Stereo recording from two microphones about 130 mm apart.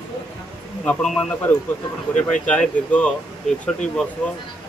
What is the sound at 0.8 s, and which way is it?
A man's voice, 10° left (ahead or behind).